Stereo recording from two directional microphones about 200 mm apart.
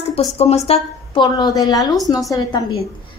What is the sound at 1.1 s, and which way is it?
A woman's voice, 20° left (ahead or behind).